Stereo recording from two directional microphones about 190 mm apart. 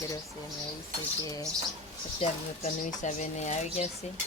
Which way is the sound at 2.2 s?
35° left (ahead or behind).